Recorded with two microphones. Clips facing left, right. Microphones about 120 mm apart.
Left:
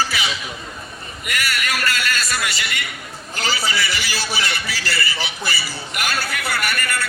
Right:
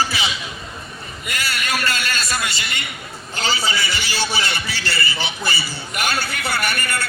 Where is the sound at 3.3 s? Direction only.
25° right (ahead or behind).